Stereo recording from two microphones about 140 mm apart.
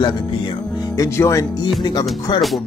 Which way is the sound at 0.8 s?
20° left (ahead or behind).